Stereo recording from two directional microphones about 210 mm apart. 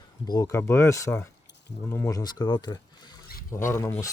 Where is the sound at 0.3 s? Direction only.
15° left (ahead or behind).